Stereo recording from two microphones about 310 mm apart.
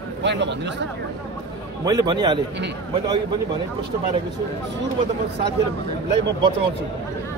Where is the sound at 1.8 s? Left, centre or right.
Centre.